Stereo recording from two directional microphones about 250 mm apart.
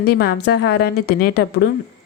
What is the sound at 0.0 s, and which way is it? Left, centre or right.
A woman's voice, left.